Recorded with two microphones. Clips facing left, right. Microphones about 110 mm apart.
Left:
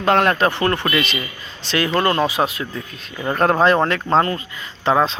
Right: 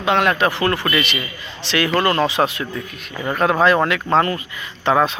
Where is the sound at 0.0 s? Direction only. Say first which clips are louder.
Left 1 dB; 40° left (ahead or behind); by 2.8 s 25° left (ahead or behind).